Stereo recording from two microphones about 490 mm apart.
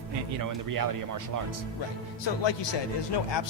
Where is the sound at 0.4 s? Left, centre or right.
Right.